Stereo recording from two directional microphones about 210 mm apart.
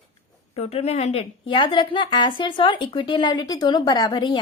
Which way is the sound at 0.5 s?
30° left (ahead or behind).